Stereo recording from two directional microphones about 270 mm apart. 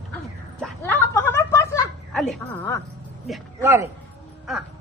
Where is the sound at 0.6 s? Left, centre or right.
Centre.